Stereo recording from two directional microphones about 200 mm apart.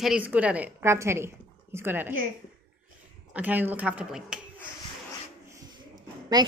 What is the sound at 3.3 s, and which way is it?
A woman's voice, 10° right (ahead or behind).